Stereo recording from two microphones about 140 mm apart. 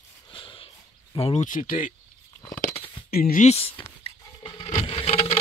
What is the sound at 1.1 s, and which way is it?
Speech, 45° left (ahead or behind).